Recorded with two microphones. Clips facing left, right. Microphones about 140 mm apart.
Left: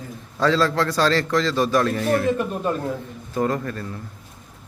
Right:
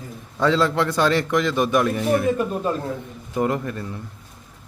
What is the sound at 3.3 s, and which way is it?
Speech, 20° right (ahead or behind).